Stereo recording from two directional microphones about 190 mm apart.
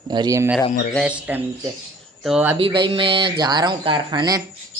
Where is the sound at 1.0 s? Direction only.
5° right (ahead or behind).